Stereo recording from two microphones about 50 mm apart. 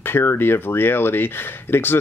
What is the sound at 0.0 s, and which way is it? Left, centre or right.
Speech, left.